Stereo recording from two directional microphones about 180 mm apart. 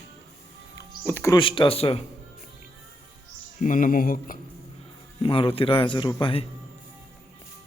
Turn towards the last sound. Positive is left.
turn(degrees=30)  # may be behind; listen again after turning